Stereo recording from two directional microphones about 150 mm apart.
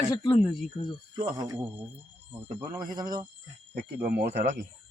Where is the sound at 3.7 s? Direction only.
80° right.